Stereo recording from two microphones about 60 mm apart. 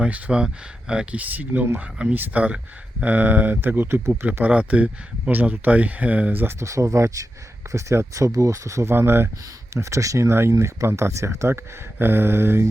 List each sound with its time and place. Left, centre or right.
0.0 s speech: centre
1.2 s speech: right
4.4 s speech: right
6.6 s speech: right
9.7 s speech: right